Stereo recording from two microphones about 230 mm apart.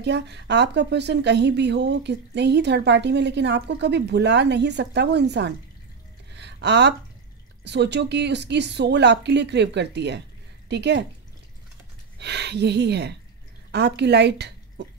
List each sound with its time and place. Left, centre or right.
0.0 s speech: right
6.3 s a sound: right
7.6 s speech: right
12.2 s speech: right